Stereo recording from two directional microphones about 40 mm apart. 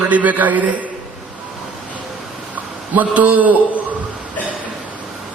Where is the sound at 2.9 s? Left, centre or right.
Right.